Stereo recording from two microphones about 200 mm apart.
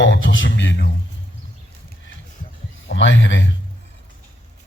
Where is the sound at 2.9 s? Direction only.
65° left (ahead or behind).